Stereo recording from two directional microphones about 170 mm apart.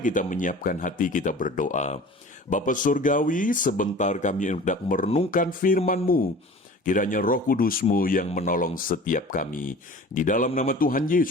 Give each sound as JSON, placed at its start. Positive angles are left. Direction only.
{"t": 0.0, "sound": "speech", "side_deg": 50}
{"t": 5.0, "sound": "speech", "side_deg": 35}
{"t": 5.3, "sound": "speech", "side_deg": 55}